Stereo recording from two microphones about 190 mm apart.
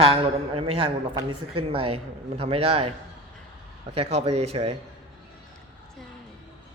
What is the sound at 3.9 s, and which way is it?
Speech, 30° right (ahead or behind).